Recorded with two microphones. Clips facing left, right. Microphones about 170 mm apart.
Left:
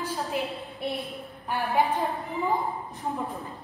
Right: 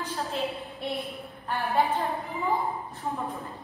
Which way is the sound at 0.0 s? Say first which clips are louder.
Left 1 dB; 15° left (ahead or behind).